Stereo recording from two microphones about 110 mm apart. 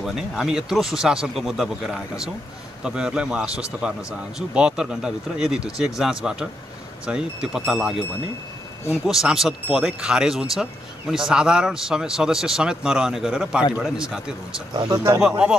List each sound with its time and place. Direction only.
0.0 s speech: 5° right (ahead or behind)
9.0 s speech: 5° right (ahead or behind)
14.7 s speech: 45° right (ahead or behind)
15.1 s speech: 5° right (ahead or behind)